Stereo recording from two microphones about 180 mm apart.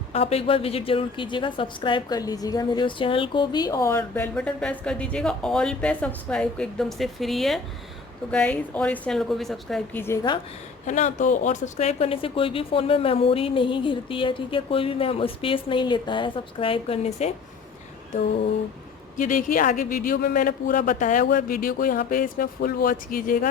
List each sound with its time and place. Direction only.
0.1 s a woman's voice: 35° left (ahead or behind); by 10.0 s centre (ahead or behind)
10.3 s a woman's voice: 25° left (ahead or behind)
10.8 s speech: 40° left (ahead or behind)
19.1 s speech: 45° left (ahead or behind)